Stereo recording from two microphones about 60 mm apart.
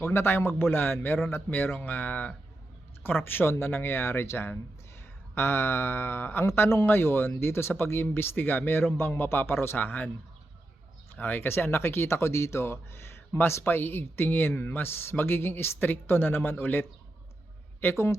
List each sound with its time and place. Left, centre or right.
0.0 s speech: left
3.2 s speech: left
6.5 s a man's voice: left
6.8 s speech: left
9.7 s speech: left
11.1 s speech: left
17.7 s speech: left